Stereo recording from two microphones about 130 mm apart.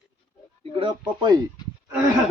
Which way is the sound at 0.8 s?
35° right (ahead or behind).